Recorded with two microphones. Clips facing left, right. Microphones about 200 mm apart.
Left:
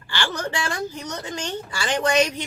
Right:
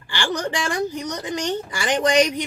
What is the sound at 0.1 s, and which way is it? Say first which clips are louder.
A woman's voice: right 3 dB; 15° right (ahead or behind).